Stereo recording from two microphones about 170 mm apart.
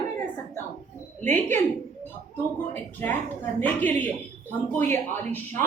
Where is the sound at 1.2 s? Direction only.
10° left (ahead or behind).